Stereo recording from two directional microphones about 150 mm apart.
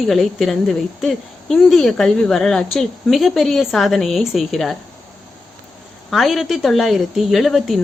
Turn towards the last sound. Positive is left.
turn(degrees=0)  # may be behind; listen again after turning